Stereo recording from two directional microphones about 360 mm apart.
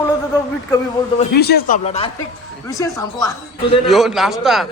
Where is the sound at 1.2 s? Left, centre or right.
Left.